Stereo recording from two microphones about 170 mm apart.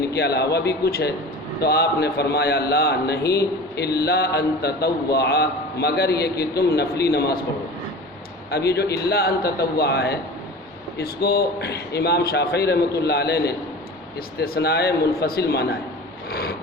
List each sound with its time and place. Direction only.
0.1 s a man's voice: 75° left (ahead or behind)
8.4 s a man's voice: 70° left (ahead or behind)
16.3 s a sound: 65° left (ahead or behind)